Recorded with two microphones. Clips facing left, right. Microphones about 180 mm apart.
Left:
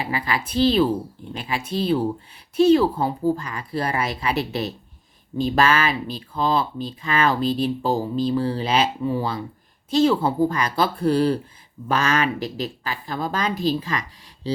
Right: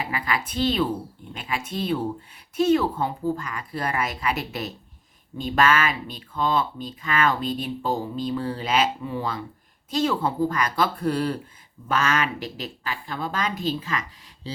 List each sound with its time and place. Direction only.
0.0 s a woman's voice: 30° left (ahead or behind)